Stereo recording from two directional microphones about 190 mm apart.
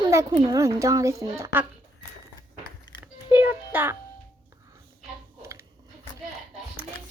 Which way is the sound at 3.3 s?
10° right (ahead or behind).